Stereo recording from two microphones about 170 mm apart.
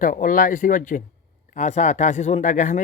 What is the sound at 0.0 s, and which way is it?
Speech, 50° left (ahead or behind).